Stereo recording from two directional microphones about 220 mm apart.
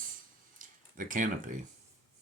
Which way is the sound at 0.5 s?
35° right (ahead or behind).